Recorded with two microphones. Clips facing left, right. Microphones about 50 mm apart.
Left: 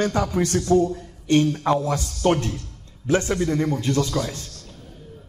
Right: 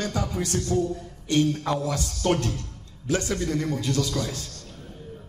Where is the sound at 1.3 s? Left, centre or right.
Left.